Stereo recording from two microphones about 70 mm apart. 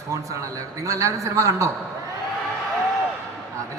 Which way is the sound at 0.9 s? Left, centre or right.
Right.